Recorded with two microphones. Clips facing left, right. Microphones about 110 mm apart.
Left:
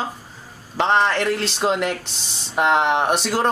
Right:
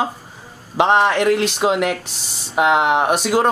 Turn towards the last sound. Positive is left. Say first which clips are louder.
# right 3 dB
turn(degrees=-5)  # may be behind; listen again after turning